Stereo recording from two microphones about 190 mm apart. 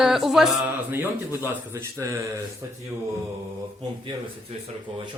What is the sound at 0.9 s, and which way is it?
Speech, 15° right (ahead or behind).